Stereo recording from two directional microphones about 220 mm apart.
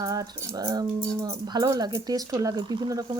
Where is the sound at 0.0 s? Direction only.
15° right (ahead or behind).